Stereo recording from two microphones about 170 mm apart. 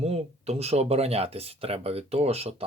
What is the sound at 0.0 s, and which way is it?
Speech, 40° right (ahead or behind).